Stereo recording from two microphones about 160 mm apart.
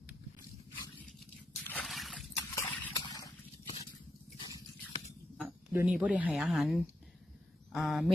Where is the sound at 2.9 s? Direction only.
25° left (ahead or behind).